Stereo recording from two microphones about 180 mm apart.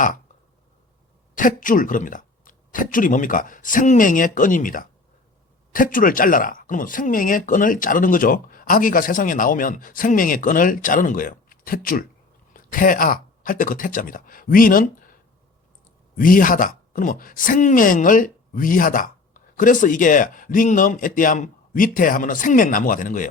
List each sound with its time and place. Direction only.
1.4 s speech: 50° left (ahead or behind)
16.1 s speech: 50° left (ahead or behind)